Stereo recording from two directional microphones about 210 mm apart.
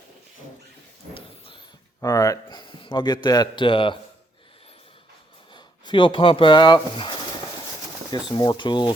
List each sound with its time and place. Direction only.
2.0 s a sound: 15° left (ahead or behind)
3.2 s a man's voice: 20° left (ahead or behind)
5.5 s speech: 20° left (ahead or behind)
8.3 s a man's voice: 20° left (ahead or behind)